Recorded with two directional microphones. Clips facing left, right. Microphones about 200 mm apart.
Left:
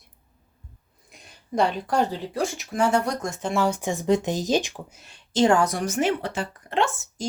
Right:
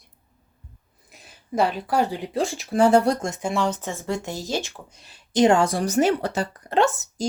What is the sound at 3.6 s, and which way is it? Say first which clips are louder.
Speech: left 5 dB; 15° left (ahead or behind).